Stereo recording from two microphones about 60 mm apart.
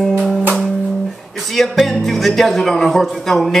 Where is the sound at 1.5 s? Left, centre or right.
Centre.